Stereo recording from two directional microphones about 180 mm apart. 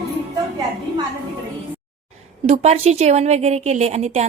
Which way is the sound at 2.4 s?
35° right (ahead or behind).